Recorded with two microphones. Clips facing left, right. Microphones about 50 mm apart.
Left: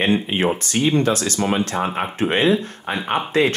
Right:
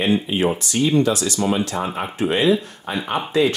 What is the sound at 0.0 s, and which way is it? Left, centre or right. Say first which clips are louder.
Speech: even; left.